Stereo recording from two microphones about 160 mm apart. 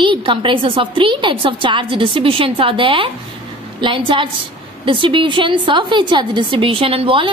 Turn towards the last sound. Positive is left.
turn(degrees=-35)  # may be behind; listen again after turning